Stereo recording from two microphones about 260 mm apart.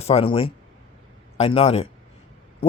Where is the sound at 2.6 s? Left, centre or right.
Left.